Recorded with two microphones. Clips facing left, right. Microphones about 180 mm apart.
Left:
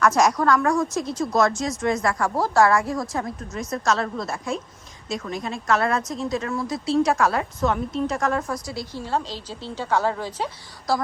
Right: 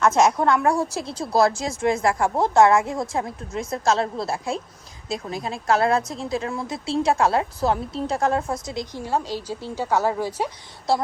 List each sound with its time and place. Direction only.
0.0 s a woman's voice: 25° right (ahead or behind)
10.9 s a woman's voice: 25° right (ahead or behind)